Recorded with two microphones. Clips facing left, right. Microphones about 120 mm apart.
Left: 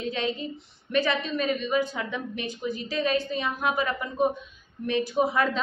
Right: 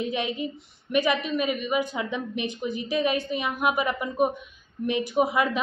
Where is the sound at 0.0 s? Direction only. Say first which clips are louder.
Right 1 dB; 15° right (ahead or behind).